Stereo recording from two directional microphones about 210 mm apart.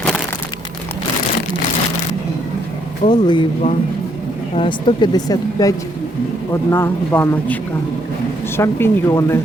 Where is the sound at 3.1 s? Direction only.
20° left (ahead or behind).